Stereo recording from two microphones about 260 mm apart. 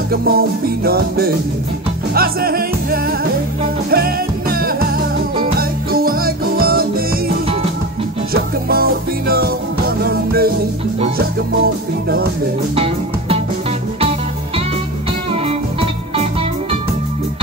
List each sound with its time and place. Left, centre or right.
0.1 s music: right
8.3 s music: right
12.7 s music: right